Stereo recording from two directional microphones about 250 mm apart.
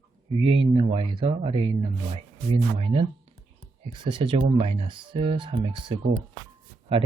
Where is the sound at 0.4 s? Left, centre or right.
Right.